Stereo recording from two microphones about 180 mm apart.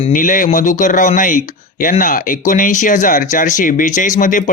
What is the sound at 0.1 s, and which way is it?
A man's voice, 45° left (ahead or behind).